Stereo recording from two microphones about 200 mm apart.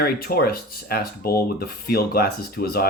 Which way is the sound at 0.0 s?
50° left (ahead or behind).